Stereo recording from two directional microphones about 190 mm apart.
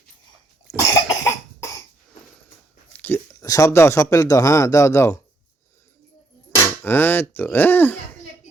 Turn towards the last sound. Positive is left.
turn(degrees=10)  # may be behind; listen again after turning